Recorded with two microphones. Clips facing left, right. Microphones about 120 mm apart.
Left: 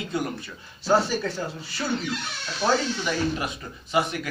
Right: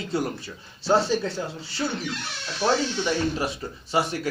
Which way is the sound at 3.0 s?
30° right (ahead or behind).